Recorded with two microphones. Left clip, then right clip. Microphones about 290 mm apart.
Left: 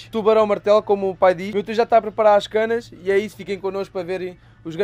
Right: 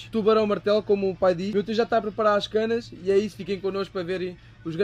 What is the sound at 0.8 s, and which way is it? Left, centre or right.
Speech, left.